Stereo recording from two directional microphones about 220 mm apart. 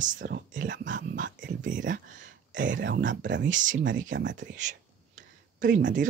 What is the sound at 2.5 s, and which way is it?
Speech, 55° right (ahead or behind).